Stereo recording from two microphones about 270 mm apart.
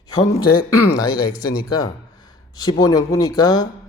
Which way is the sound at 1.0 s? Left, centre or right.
Centre.